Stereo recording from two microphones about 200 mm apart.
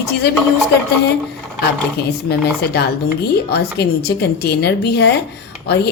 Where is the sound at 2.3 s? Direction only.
55° left (ahead or behind).